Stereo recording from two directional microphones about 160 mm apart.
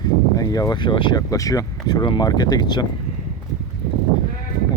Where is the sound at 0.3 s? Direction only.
25° left (ahead or behind).